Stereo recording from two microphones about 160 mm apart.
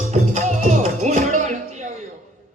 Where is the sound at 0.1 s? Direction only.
45° right (ahead or behind).